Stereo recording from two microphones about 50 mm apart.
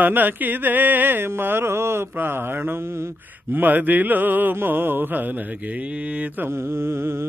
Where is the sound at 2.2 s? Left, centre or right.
Right.